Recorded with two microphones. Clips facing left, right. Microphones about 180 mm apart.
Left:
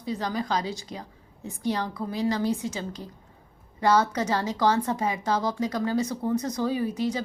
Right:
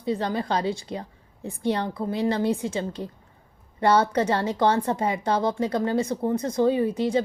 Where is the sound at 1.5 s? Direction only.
30° right (ahead or behind).